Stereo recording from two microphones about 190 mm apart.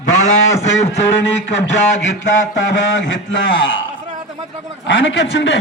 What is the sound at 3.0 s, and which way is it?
Speech, 85° left.